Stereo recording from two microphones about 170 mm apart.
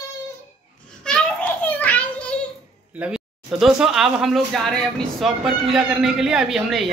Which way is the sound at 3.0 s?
5° right (ahead or behind).